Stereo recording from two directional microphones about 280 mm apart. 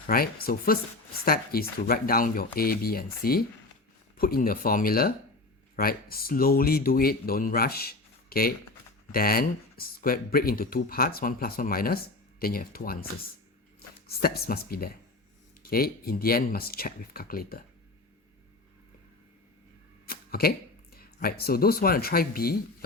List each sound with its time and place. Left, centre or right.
0.1 s speech: left
20.1 s a sound: left
20.9 s speech: left